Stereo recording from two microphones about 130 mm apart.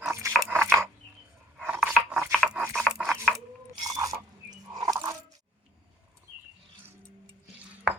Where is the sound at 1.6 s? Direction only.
10° right (ahead or behind).